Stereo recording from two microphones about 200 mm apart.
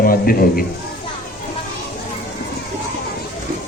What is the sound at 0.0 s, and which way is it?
Speech, 45° left (ahead or behind).